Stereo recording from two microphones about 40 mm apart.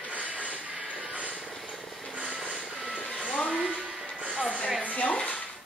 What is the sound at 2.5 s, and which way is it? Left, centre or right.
Vehicle, centre.